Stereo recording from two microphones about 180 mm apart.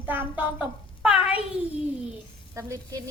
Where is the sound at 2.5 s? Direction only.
15° right (ahead or behind).